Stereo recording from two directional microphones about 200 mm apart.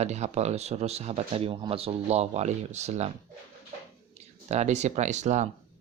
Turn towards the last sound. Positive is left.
turn(degrees=-35)  # may be behind; listen again after turning